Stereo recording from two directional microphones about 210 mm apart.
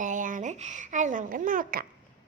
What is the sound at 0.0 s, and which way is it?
A woman's voice, 35° right (ahead or behind).